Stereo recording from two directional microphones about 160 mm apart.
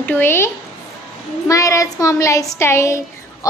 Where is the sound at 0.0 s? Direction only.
15° left (ahead or behind).